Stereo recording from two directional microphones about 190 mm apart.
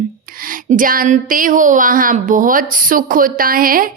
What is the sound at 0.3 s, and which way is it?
Music, 45° right (ahead or behind).